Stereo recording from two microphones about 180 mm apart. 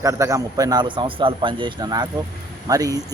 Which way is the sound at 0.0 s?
15° right (ahead or behind).